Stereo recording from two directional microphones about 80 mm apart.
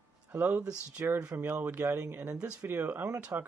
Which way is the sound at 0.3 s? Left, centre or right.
Right.